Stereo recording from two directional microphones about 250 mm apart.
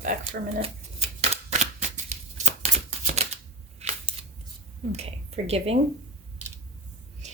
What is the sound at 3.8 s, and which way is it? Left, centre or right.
Scissors, right.